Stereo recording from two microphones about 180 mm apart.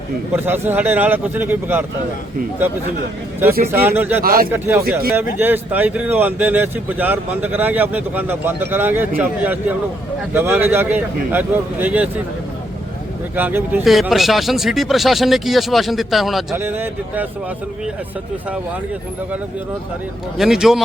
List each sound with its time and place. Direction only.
0.3 s speech: 10° right (ahead or behind)
3.7 s speech: 10° right (ahead or behind)
4.2 s speech: 55° right (ahead or behind)
4.5 s speech: 10° right (ahead or behind)
4.8 s speech: 55° right (ahead or behind)
5.4 s speech: 10° right (ahead or behind)
13.3 s speech: 10° right (ahead or behind)
20.4 s speech: centre (ahead or behind)